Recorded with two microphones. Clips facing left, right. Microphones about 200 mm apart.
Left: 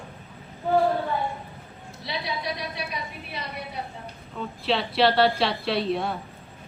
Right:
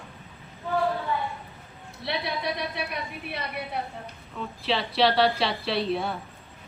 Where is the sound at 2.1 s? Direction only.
60° right (ahead or behind).